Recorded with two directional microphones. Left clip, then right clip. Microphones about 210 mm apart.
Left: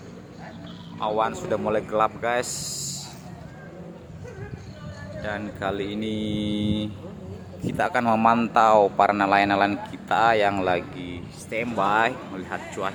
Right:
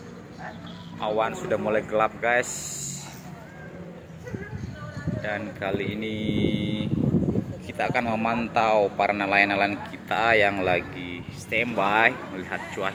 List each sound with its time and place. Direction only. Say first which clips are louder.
0.9 s speech: left 1 dB; 15° left (ahead or behind)
5.2 s speech: left 1 dB; 15° left (ahead or behind)